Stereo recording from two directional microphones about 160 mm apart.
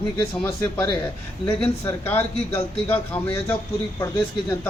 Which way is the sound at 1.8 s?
10° left (ahead or behind).